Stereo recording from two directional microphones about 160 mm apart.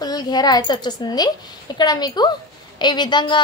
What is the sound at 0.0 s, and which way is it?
A woman's voice, 25° left (ahead or behind).